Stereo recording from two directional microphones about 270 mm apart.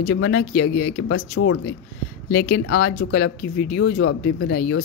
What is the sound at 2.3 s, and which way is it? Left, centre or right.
Speech, left.